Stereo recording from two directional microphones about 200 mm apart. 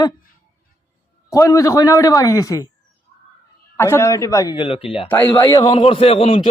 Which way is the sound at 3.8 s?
15° left (ahead or behind).